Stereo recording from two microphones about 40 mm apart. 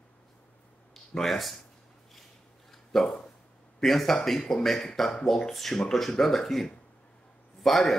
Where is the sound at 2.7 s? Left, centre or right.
Centre.